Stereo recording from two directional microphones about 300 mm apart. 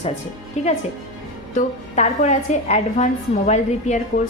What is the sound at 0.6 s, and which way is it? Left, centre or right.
A woman's voice, left.